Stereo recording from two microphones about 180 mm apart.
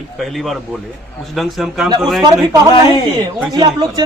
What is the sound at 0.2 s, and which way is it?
A man's voice, centre (ahead or behind).